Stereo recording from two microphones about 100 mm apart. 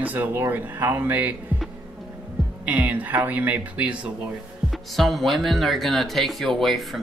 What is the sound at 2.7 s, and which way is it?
Speech, 15° right (ahead or behind).